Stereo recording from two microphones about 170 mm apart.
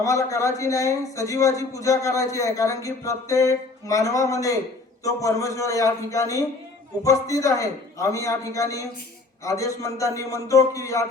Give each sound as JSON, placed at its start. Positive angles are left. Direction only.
{"t": 0.0, "sound": "a man's voice", "side_deg": 20}